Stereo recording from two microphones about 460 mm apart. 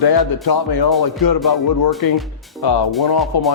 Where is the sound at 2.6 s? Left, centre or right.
Left.